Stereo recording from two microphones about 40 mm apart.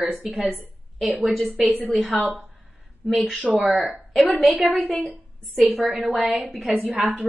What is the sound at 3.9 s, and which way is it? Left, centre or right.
Speech, right.